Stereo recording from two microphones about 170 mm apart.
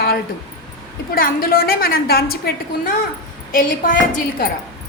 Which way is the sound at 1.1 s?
60° left (ahead or behind).